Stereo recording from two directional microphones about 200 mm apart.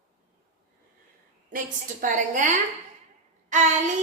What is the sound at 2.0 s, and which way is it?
Speech, 40° right (ahead or behind).